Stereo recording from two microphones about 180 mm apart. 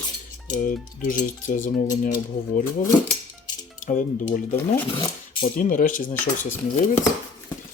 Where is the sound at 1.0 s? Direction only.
50° left (ahead or behind).